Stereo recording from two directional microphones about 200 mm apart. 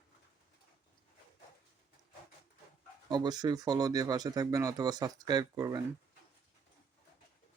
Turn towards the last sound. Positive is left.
turn(degrees=-20)  # may be behind; listen again after turning